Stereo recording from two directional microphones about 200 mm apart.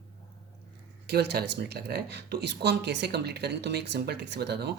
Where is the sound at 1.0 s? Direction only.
55° right (ahead or behind).